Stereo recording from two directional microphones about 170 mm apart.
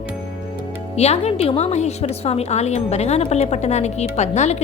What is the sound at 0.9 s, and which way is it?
A woman's voice, 40° left (ahead or behind).